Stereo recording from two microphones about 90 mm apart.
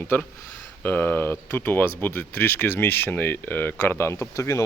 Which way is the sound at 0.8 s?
20° left (ahead or behind).